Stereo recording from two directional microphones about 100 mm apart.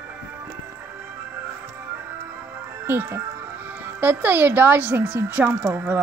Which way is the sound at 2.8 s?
20° right (ahead or behind).